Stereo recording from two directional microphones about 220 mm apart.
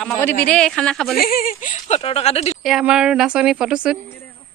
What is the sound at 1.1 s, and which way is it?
Speech, 40° left (ahead or behind).